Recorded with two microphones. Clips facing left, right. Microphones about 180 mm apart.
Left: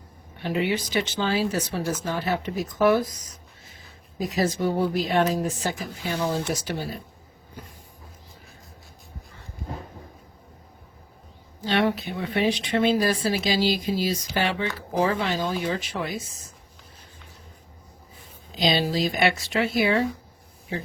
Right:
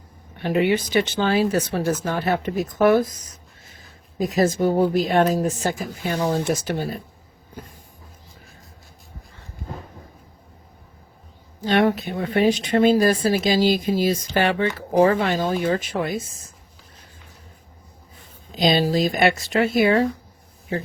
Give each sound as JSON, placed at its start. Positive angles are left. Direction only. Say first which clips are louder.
{"t": 0.4, "sound": "speech", "louder": "right 5 dB", "side_deg": -55}
{"t": 4.2, "sound": "speech", "louder": "right 5 dB", "side_deg": -45}
{"t": 11.6, "sound": "speech", "louder": "right 4 dB", "side_deg": -45}
{"t": 18.5, "sound": "speech", "louder": "right 4 dB", "side_deg": -50}